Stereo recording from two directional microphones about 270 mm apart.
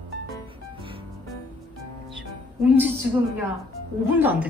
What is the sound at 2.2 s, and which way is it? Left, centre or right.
Music, centre.